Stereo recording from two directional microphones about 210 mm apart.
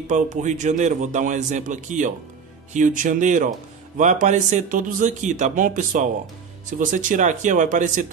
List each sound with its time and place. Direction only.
0.0 s a man's voice: 35° right (ahead or behind)